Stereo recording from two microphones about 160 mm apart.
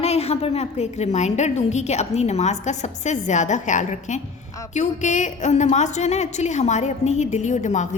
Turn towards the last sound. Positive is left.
turn(degrees=50)  # may be behind; listen again after turning